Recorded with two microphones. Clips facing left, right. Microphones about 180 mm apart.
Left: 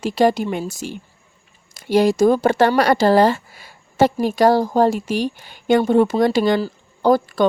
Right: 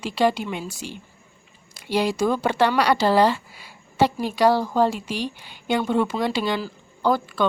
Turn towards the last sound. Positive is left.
turn(degrees=40)  # may be behind; listen again after turning